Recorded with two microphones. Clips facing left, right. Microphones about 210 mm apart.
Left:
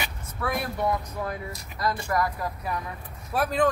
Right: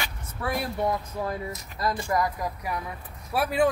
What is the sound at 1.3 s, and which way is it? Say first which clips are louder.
Speech: right 2 dB; 25° right (ahead or behind).